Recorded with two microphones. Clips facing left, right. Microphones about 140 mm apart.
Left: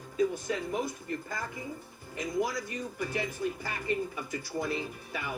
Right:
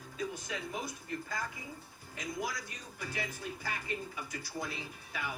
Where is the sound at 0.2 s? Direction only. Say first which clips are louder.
Left 10 dB; 55° left (ahead or behind).